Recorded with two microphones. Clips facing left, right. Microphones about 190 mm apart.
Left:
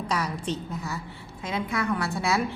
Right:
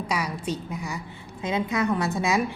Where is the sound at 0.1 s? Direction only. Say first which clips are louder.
Even; 10° right (ahead or behind).